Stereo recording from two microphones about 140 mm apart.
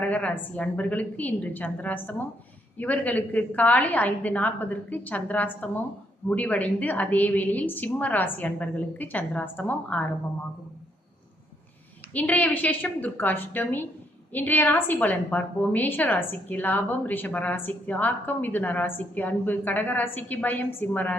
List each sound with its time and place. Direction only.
0.0 s a woman's voice: 10° left (ahead or behind)
12.1 s a woman's voice: 10° left (ahead or behind)